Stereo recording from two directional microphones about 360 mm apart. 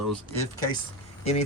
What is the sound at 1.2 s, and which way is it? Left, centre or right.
Speech, centre.